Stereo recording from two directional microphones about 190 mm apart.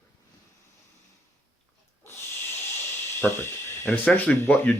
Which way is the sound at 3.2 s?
10° left (ahead or behind).